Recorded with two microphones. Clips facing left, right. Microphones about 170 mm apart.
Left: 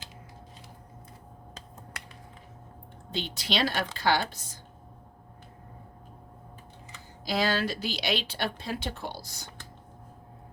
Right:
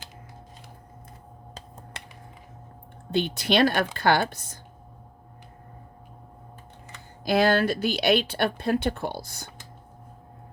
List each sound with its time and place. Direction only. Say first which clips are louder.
2.0 s music: right 3 dB; 25° right (ahead or behind)
3.1 s speech: right 8 dB; 55° right (ahead or behind)
6.9 s speech: right 7 dB; 55° right (ahead or behind)